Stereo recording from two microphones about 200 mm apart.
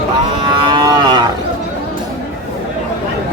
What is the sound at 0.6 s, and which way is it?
Livestock, 20° right (ahead or behind).